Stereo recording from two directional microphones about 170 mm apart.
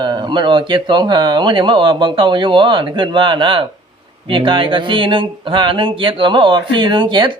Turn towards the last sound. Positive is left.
turn(degrees=-30)  # may be behind; listen again after turning